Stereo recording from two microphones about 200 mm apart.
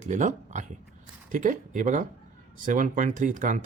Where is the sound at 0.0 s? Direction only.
35° right (ahead or behind).